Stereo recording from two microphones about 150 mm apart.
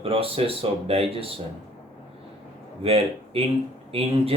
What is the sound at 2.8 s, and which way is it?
A man's voice, 40° right (ahead or behind).